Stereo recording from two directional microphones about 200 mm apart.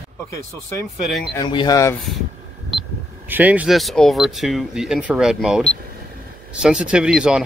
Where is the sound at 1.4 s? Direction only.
20° left (ahead or behind).